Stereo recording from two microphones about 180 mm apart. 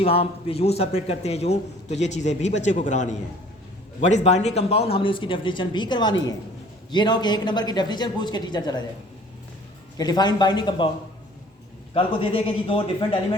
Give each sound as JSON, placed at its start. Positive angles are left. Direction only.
{"t": 0.0, "sound": "a man's voice", "side_deg": 30}
{"t": 4.1, "sound": "speech", "side_deg": 40}
{"t": 10.0, "sound": "speech", "side_deg": 20}
{"t": 11.9, "sound": "a man's voice", "side_deg": 30}